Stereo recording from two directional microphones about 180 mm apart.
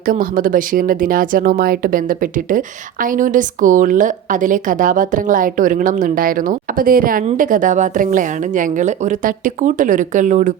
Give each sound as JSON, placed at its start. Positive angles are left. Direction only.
{"t": 0.0, "sound": "speech", "side_deg": -50}